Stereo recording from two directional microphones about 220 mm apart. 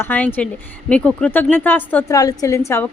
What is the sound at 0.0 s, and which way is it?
A woman's voice, 10° left (ahead or behind).